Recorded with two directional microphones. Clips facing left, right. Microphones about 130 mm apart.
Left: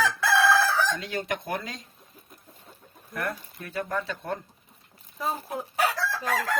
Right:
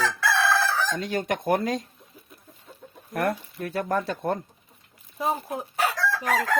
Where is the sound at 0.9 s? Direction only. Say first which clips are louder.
Right 4 dB; 40° right (ahead or behind).